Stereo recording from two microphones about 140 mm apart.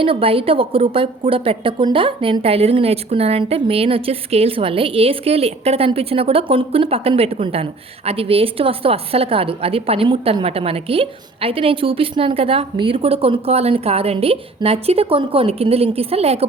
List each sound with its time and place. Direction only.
0.0 s a woman's voice: 40° right (ahead or behind)